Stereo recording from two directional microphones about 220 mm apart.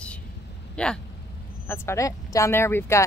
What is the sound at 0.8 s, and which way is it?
Speech, 5° left (ahead or behind).